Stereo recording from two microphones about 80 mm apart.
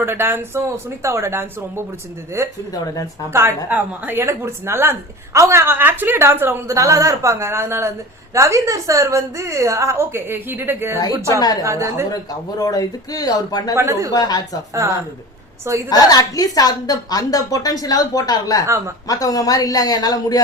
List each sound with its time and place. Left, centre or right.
0.0 s a woman's voice: right
2.7 s a woman's voice: left
3.2 s a woman's voice: right
3.7 s a woman's voice: right
4.2 s a woman's voice: right
6.7 s a woman's voice: right
11.6 s a woman's voice: right
12.1 s a woman's voice: left
13.7 s a woman's voice: right
14.1 s speech: left
14.7 s speech: right
15.9 s a woman's voice: left
18.6 s a woman's voice: right
19.0 s a woman's voice: left